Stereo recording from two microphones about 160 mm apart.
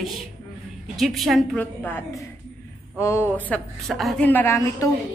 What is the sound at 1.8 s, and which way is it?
A woman's voice, 15° left (ahead or behind).